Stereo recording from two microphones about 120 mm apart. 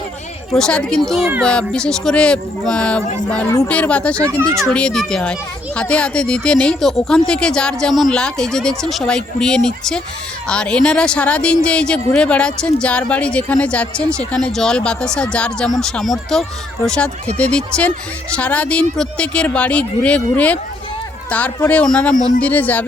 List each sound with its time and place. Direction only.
0.5 s speech: 5° left (ahead or behind)
4.2 s speech: 25° right (ahead or behind)
4.7 s speech: 10° left (ahead or behind)